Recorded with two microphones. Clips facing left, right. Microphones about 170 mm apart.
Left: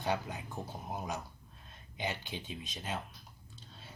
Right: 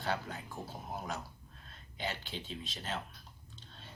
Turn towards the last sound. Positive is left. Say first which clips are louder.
# even
turn(degrees=5)  # may be behind; listen again after turning